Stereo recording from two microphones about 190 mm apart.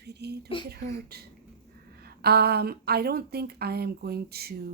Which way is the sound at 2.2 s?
55° right (ahead or behind).